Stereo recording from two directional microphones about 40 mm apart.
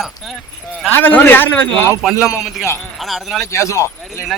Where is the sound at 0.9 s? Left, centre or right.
Left.